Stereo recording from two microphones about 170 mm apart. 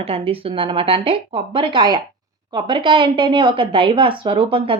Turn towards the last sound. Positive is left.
turn(degrees=-30)  # may be behind; listen again after turning